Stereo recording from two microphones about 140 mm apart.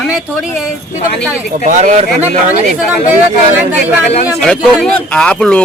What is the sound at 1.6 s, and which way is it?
Speech, 60° right (ahead or behind).